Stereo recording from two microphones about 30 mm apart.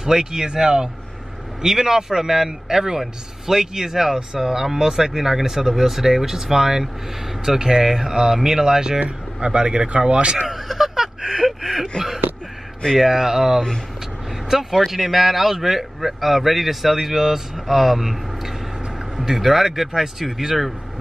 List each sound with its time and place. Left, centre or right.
0.0 s speech: centre
9.4 s speech: right
10.5 s a sound: centre
12.9 s a man's voice: centre
19.1 s speech: centre